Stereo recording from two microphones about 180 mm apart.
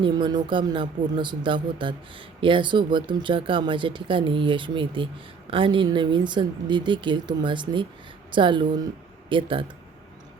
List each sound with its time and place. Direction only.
0.0 s speech: 25° right (ahead or behind)